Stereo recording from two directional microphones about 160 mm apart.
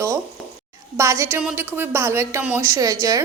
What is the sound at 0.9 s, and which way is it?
A woman's voice, 15° right (ahead or behind).